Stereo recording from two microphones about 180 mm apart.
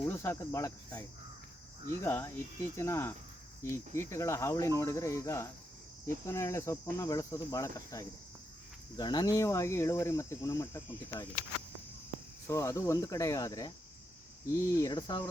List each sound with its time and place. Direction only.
0.1 s speech: 15° left (ahead or behind)
12.5 s speech: 15° left (ahead or behind)
14.8 s speech: 20° left (ahead or behind)